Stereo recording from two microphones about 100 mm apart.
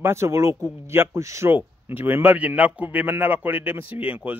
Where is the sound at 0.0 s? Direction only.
25° right (ahead or behind).